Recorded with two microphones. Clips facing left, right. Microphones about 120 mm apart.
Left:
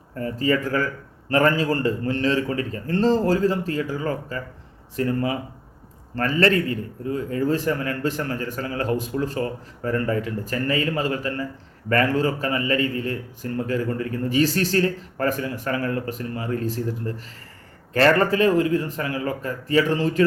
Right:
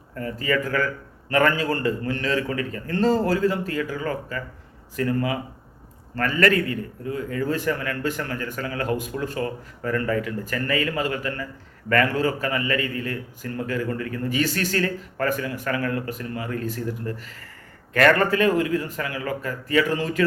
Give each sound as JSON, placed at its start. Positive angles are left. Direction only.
{"t": 0.2, "sound": "a man's voice", "side_deg": 35}